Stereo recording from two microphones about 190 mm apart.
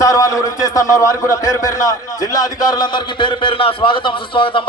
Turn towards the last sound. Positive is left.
turn(degrees=25)  # may be behind; listen again after turning